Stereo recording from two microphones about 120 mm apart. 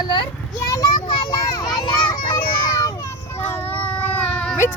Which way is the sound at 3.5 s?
15° left (ahead or behind).